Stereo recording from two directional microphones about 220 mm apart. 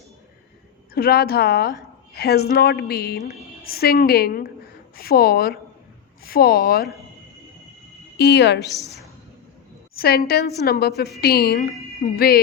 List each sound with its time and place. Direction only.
0.9 s a woman's voice: 45° left (ahead or behind)
8.2 s a woman's voice: 50° left (ahead or behind)
9.9 s a woman's voice: 45° left (ahead or behind)